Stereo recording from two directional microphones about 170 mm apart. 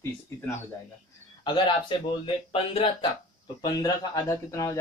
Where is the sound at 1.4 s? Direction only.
25° left (ahead or behind).